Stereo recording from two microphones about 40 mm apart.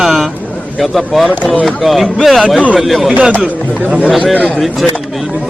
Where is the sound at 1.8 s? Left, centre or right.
Centre.